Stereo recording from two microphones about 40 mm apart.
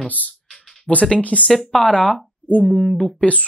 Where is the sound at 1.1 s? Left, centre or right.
Left.